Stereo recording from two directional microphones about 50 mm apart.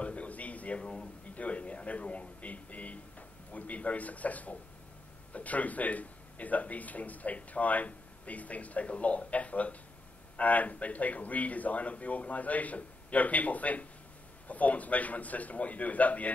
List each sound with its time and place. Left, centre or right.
0.0 s a man's voice: left